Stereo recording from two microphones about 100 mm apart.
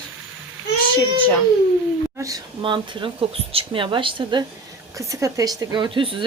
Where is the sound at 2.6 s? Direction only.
55° right (ahead or behind).